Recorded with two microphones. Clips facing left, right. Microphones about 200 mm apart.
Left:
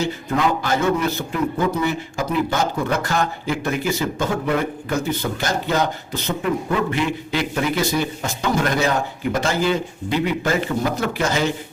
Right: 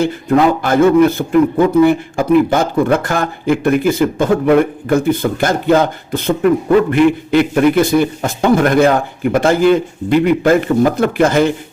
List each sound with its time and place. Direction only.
0.0 s a man's voice: 55° right (ahead or behind)